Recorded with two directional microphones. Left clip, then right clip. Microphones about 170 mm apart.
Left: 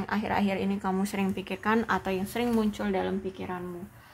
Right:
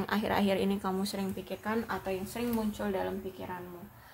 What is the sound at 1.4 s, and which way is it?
Speech, 40° left (ahead or behind).